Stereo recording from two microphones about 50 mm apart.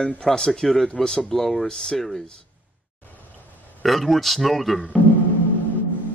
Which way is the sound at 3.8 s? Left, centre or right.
Centre.